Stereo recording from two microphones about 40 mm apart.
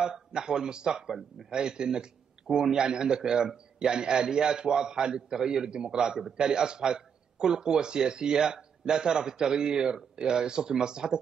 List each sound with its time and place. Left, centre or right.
0.0 s a man's voice: centre